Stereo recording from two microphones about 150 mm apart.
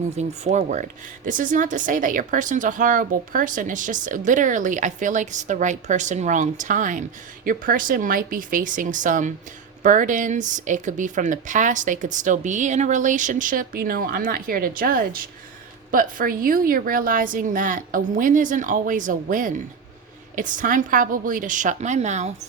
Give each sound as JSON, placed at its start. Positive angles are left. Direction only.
{"t": 0.2, "sound": "speech", "side_deg": -50}